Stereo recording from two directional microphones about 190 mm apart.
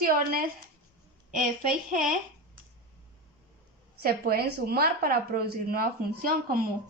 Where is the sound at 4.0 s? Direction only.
55° right (ahead or behind).